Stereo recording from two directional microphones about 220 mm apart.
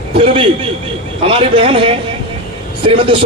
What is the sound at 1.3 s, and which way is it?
A man's voice, 25° right (ahead or behind).